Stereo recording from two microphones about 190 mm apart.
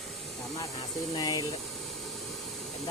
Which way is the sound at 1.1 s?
20° left (ahead or behind).